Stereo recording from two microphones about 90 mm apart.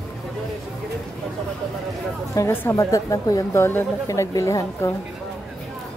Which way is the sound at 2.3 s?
30° left (ahead or behind).